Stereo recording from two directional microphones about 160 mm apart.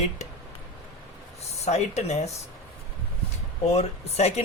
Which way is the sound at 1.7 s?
45° left (ahead or behind).